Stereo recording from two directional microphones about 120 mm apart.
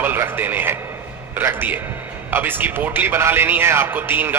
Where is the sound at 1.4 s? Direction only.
15° right (ahead or behind).